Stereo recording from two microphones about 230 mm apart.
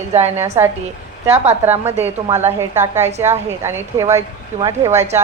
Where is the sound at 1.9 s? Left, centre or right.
Right.